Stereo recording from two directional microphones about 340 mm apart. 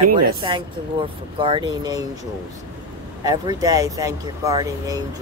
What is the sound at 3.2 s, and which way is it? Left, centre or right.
Speech, centre.